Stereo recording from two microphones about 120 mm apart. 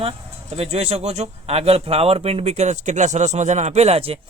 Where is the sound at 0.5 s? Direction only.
60° right (ahead or behind).